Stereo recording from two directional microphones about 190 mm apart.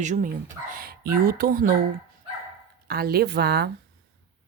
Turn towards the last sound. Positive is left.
turn(degrees=-60)  # may be behind; listen again after turning